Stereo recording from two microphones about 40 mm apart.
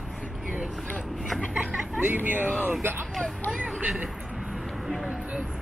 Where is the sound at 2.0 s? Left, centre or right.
Right.